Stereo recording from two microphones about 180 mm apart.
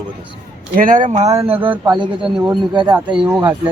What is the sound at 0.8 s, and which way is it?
Speech, 45° right (ahead or behind).